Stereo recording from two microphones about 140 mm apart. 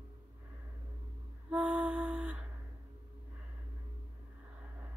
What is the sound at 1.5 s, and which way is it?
Music, 10° right (ahead or behind).